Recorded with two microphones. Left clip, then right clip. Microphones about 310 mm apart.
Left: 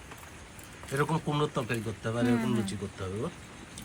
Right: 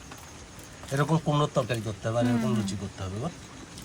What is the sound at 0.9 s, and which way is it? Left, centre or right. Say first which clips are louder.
Speech: right 3 dB; right.